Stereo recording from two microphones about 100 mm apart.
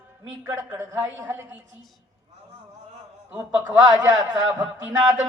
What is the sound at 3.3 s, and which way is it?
Speech, 25° right (ahead or behind).